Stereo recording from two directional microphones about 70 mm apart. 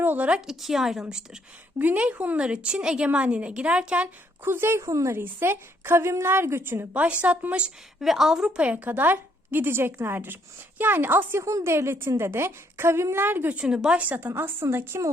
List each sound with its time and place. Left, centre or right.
0.0 s speech: right
0.3 s a woman's voice: centre
1.8 s a woman's voice: right
4.4 s a woman's voice: right
4.8 s a woman's voice: right
5.1 s a woman's voice: right
6.9 s a woman's voice: right
8.0 s a woman's voice: centre; by 11.4 s right
11.4 s a woman's voice: right
13.6 s a woman's voice: centre; by 15.0 s right